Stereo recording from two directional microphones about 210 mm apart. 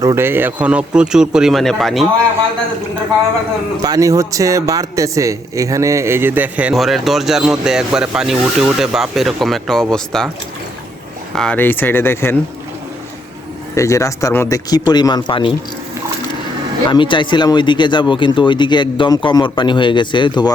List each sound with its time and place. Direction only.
0.0 s speech: 15° right (ahead or behind)
3.8 s speech: 15° right (ahead or behind); by 10.2 s centre (ahead or behind)
11.3 s speech: 5° left (ahead or behind)
13.7 s speech: 15° left (ahead or behind)
16.9 s speech: 25° left (ahead or behind)